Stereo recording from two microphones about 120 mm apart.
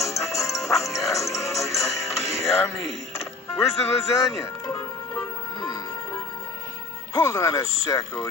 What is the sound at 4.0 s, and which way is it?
Music, 25° left (ahead or behind).